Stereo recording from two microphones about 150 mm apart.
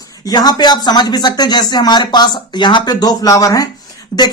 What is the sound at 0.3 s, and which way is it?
Speech, 25° left (ahead or behind).